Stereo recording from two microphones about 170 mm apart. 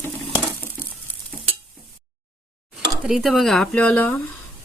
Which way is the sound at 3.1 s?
Centre (ahead or behind).